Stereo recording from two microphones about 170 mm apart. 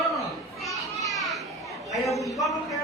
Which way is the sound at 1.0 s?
Centre (ahead or behind).